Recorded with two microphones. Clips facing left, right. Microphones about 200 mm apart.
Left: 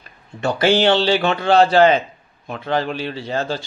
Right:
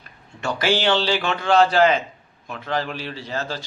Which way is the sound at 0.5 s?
30° left (ahead or behind).